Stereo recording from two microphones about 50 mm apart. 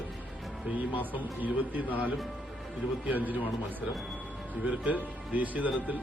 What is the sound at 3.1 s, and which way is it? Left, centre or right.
Speech, right.